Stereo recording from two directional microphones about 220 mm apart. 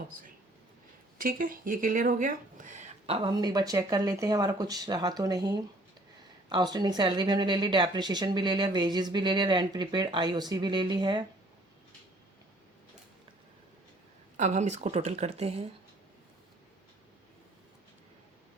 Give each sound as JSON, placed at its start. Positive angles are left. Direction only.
{"t": 1.2, "sound": "a woman's voice", "side_deg": -40}
{"t": 14.3, "sound": "speech", "side_deg": -35}